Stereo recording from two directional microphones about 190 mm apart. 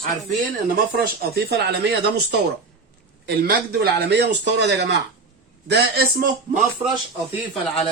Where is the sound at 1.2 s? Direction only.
55° right (ahead or behind).